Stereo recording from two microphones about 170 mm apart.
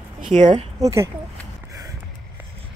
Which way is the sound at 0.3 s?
45° right (ahead or behind).